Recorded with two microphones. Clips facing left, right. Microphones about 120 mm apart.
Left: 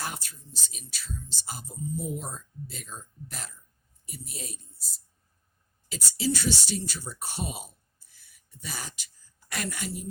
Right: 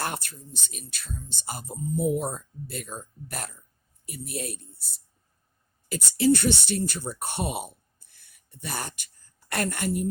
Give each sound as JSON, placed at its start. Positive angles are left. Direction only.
{"t": 0.0, "sound": "speech", "side_deg": -60}